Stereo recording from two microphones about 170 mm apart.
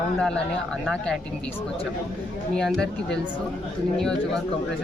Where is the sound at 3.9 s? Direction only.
5° left (ahead or behind).